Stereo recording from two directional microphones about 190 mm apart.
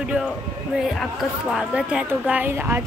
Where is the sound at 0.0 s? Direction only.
5° right (ahead or behind).